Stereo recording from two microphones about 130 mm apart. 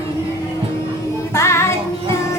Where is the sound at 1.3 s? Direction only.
20° left (ahead or behind).